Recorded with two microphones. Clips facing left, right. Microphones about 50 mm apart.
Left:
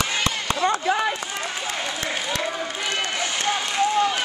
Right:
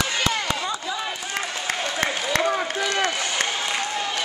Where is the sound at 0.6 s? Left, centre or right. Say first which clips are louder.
Left 7 dB; left.